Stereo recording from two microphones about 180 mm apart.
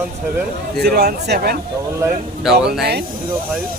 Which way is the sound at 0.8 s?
60° right (ahead or behind).